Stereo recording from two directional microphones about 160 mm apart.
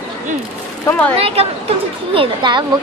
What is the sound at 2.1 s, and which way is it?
Speech, 30° right (ahead or behind).